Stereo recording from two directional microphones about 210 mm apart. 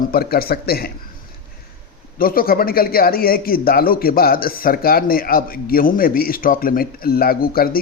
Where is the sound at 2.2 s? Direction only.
45° left (ahead or behind).